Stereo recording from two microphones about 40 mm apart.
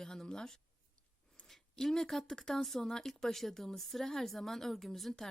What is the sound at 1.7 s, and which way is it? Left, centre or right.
A woman's voice, centre.